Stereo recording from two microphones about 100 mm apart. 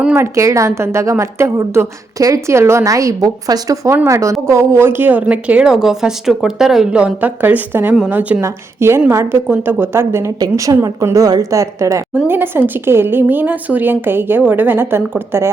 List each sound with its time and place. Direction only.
0.2 s a woman's voice: 30° right (ahead or behind); by 8.4 s 15° right (ahead or behind)
8.4 s a woman's voice: 25° right (ahead or behind)
10.4 s a woman's voice: 40° right (ahead or behind)
12.1 s a woman's voice: 20° right (ahead or behind)